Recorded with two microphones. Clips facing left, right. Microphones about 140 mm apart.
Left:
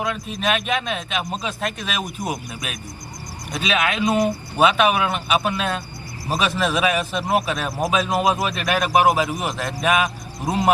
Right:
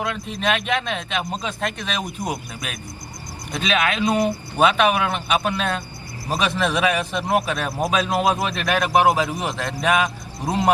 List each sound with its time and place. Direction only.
0.0 s a man's voice: 10° left (ahead or behind)